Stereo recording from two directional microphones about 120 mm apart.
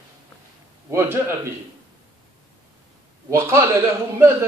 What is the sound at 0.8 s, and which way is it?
Speech, 20° right (ahead or behind).